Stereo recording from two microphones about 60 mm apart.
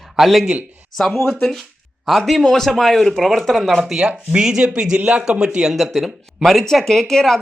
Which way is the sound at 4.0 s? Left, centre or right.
Centre.